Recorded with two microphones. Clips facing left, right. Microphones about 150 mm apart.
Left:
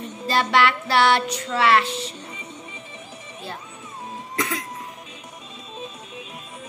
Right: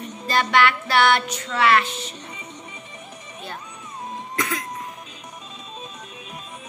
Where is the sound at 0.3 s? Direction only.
30° left (ahead or behind).